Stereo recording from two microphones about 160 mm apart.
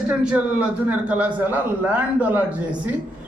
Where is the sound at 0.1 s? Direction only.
10° right (ahead or behind).